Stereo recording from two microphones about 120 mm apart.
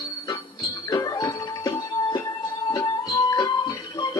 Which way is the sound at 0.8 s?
35° left (ahead or behind).